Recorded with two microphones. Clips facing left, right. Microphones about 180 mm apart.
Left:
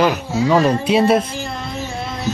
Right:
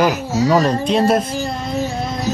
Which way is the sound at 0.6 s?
5° left (ahead or behind).